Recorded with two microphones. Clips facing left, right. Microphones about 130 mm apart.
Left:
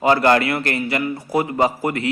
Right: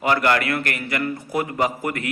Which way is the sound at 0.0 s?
25° left (ahead or behind).